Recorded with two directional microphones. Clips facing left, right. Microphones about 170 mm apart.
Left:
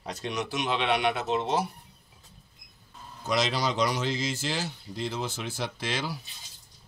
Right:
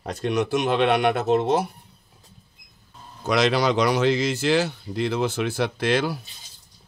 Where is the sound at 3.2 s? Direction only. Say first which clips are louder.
Right 7 dB; 65° right (ahead or behind).